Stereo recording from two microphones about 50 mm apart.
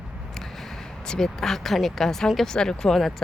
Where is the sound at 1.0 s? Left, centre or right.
Centre.